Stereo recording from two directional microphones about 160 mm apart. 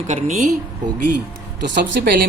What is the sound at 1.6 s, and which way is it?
Speech, 90° right.